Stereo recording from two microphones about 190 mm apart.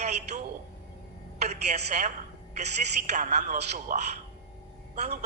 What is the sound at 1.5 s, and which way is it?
A woman's voice, 35° right (ahead or behind).